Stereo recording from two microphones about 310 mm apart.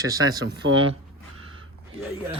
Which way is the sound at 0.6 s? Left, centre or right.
Right.